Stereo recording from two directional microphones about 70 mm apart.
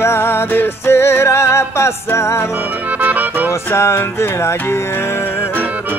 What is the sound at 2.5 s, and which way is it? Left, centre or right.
Accordion, right.